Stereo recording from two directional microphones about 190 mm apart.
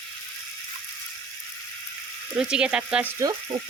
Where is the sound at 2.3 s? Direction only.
5° right (ahead or behind).